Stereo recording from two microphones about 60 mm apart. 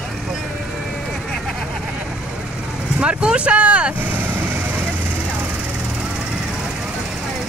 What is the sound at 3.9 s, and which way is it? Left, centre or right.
Vehicle, right.